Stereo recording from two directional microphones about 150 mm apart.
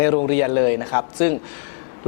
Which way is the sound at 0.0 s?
15° left (ahead or behind).